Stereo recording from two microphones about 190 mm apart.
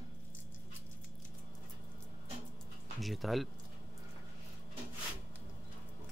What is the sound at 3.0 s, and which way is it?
Speech, centre (ahead or behind).